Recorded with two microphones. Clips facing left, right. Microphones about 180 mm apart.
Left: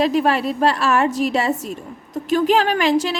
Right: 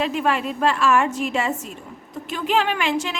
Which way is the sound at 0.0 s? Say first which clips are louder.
Left 5 dB; 35° left (ahead or behind).